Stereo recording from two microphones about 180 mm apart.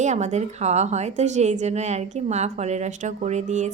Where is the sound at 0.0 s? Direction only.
40° right (ahead or behind).